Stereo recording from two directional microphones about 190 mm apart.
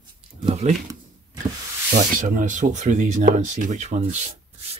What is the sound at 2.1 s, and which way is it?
Speech, 45° right (ahead or behind).